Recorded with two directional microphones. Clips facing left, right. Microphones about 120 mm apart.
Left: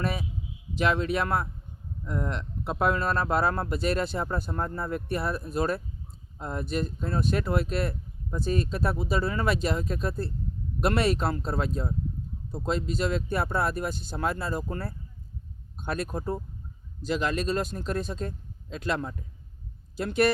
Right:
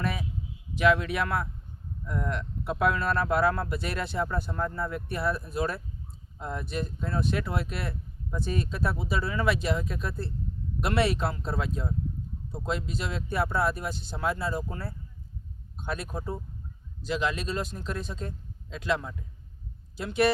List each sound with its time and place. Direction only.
0.0 s speech: 35° left (ahead or behind); by 20.2 s 50° left (ahead or behind)